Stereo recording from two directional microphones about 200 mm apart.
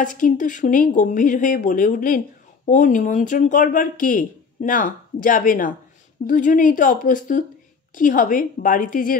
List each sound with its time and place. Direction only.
0.0 s a woman's voice: 40° left (ahead or behind)